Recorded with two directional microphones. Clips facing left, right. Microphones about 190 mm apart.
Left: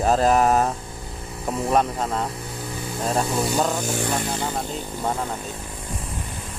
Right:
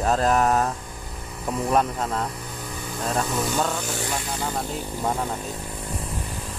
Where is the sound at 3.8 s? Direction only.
45° left (ahead or behind).